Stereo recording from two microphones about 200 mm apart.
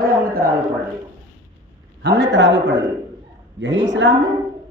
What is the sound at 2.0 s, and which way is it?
A woman's voice, 60° right (ahead or behind).